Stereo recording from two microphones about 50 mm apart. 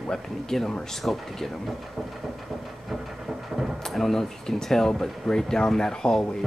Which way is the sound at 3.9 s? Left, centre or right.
Centre.